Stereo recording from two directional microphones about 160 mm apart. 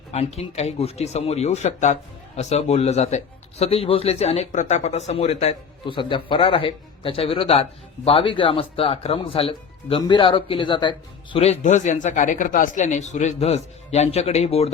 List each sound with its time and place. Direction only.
0.1 s speech: 40° left (ahead or behind)
5.8 s speech: 30° left (ahead or behind)